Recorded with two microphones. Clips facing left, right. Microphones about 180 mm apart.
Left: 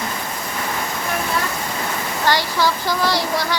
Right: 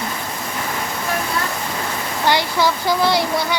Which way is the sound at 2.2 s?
15° right (ahead or behind).